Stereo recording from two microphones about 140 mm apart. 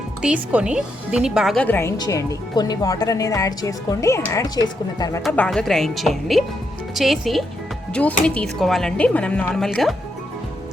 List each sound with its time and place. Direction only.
0.2 s speech: 5° right (ahead or behind)
1.5 s speech: 15° left (ahead or behind)
5.4 s speech: 5° left (ahead or behind)